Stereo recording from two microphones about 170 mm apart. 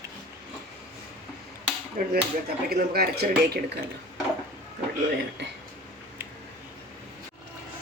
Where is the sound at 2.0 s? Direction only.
55° right (ahead or behind); by 3.8 s 70° right (ahead or behind).